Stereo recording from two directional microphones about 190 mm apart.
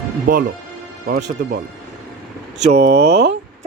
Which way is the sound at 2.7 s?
60° right (ahead or behind).